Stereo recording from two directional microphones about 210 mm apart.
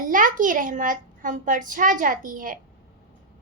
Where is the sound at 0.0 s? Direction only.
40° right (ahead or behind).